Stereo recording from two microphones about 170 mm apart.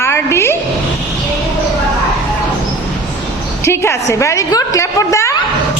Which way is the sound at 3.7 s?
15° left (ahead or behind).